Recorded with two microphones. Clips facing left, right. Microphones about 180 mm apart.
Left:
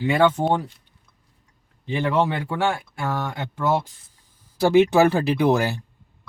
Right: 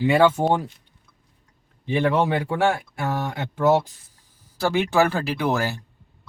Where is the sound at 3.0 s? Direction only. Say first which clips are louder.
Left 1 dB; 10° right (ahead or behind).